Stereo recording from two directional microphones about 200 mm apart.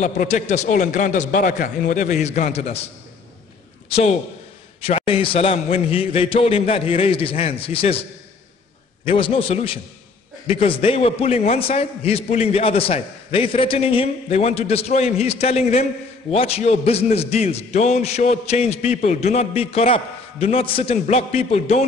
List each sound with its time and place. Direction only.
0.0 s a man's voice: 35° left (ahead or behind)
4.8 s a man's voice: 30° left (ahead or behind)
9.0 s a man's voice: 30° left (ahead or behind)